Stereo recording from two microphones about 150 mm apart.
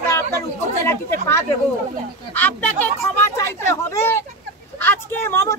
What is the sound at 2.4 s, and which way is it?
A woman's voice, 10° left (ahead or behind).